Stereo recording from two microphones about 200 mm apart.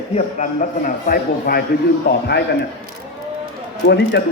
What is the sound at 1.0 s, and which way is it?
A man's voice, 50° left (ahead or behind).